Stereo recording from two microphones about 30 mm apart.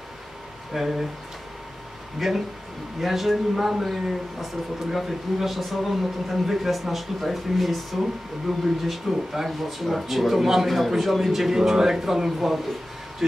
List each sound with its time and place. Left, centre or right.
0.7 s speech: centre
2.1 s speech: centre